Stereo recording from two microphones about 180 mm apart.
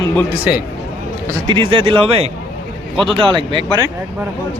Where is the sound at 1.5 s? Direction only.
30° right (ahead or behind).